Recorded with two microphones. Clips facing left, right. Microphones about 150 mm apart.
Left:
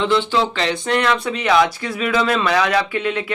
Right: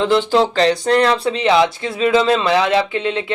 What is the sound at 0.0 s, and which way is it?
Speech, 40° right (ahead or behind).